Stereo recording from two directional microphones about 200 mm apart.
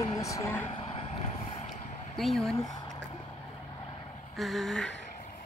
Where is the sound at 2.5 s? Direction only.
20° left (ahead or behind).